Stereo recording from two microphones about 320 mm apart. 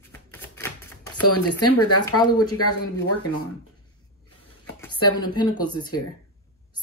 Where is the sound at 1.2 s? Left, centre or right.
Left.